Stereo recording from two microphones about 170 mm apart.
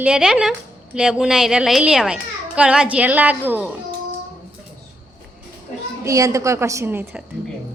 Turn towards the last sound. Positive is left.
turn(degrees=-10)  # may be behind; listen again after turning